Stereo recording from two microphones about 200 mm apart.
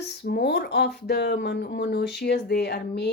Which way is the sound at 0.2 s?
55° left (ahead or behind).